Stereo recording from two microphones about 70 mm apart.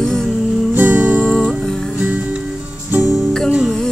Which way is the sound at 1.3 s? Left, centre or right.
Centre.